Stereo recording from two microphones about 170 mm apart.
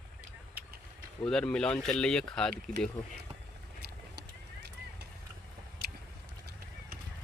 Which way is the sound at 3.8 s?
75° right (ahead or behind).